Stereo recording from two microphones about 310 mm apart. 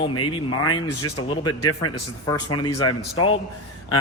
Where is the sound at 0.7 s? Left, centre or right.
Left.